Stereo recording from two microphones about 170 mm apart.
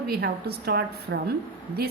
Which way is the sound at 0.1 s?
70° right (ahead or behind).